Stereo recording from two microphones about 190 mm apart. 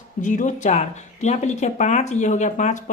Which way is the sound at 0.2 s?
40° left (ahead or behind).